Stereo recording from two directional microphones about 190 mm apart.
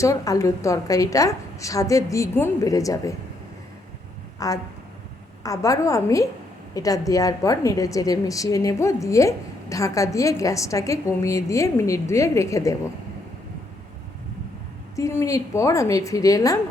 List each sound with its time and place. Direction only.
0.0 s a woman's voice: 15° left (ahead or behind)
4.4 s a woman's voice: 20° left (ahead or behind)
14.9 s a woman's voice: 15° left (ahead or behind)